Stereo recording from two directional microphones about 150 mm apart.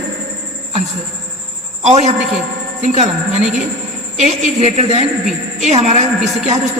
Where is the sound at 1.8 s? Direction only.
45° right (ahead or behind).